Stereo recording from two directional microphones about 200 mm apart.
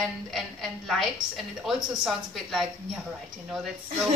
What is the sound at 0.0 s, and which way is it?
A woman's voice, centre (ahead or behind).